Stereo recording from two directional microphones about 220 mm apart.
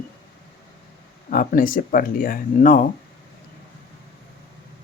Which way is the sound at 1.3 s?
40° left (ahead or behind).